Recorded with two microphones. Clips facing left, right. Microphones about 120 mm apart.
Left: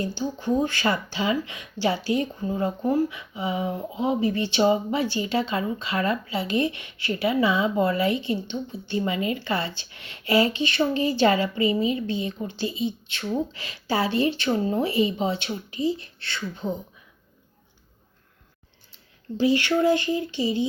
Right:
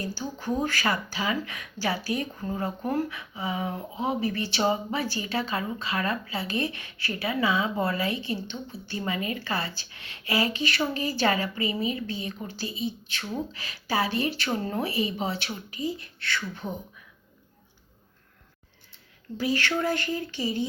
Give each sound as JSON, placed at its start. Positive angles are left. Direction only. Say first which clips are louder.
{"t": 0.0, "sound": "speech", "louder": "left 5 dB", "side_deg": 20}
{"t": 2.8, "sound": "speech", "louder": "left 6 dB", "side_deg": 15}
{"t": 19.4, "sound": "speech", "louder": "left 6 dB", "side_deg": 20}